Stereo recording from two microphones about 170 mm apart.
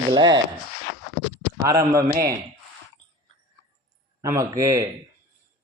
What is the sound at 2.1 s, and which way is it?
Speech, 60° right (ahead or behind).